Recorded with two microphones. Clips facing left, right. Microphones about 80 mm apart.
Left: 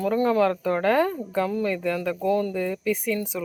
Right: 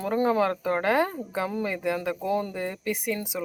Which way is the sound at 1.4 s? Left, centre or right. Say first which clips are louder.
Left 1 dB; centre.